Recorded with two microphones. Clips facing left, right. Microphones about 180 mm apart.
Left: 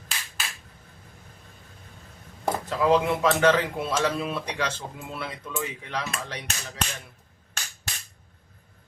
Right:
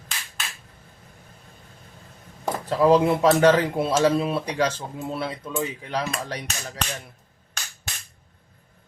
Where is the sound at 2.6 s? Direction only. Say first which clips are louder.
Right 5 dB; 35° right (ahead or behind).